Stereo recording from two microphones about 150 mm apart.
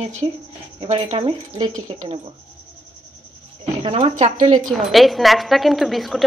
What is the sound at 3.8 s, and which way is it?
Speech, 40° right (ahead or behind).